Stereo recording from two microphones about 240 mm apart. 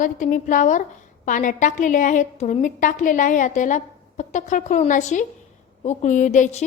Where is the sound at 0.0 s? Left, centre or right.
Left.